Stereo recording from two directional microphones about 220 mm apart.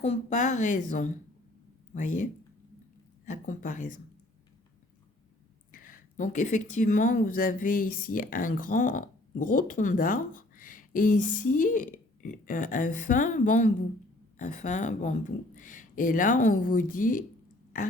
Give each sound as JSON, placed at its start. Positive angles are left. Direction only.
{"t": 0.0, "sound": "speech", "side_deg": 30}
{"t": 5.7, "sound": "speech", "side_deg": 40}